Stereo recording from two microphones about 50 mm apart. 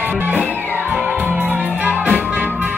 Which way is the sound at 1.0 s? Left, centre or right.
Right.